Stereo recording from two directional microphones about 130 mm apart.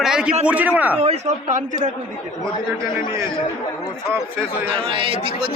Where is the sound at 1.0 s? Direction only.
60° right (ahead or behind).